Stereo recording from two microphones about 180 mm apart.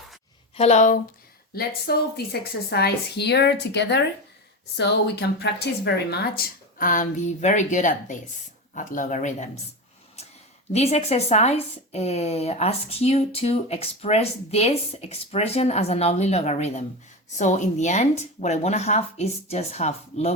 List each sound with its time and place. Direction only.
0.5 s speech: 40° left (ahead or behind)
1.5 s a woman's voice: 60° left (ahead or behind)
10.7 s speech: 35° left (ahead or behind)